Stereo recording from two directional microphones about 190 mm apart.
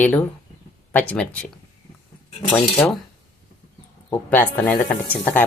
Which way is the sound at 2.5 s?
5° left (ahead or behind).